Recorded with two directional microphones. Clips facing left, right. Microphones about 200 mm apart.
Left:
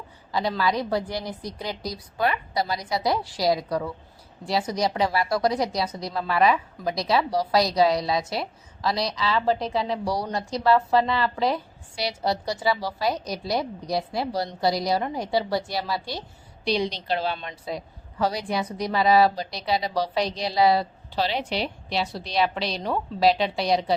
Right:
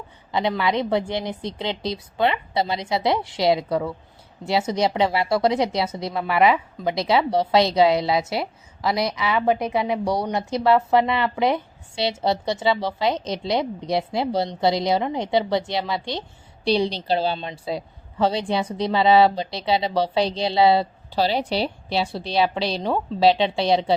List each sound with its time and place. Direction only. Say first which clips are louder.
0.3 s a woman's voice: right 2 dB; 20° right (ahead or behind)